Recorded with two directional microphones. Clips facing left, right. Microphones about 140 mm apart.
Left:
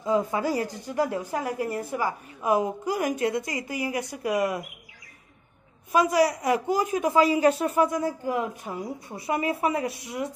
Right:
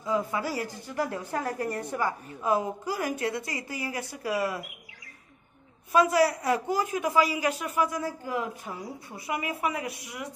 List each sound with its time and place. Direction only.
0.0 s speech: 20° left (ahead or behind)
5.9 s a woman's voice: 15° left (ahead or behind)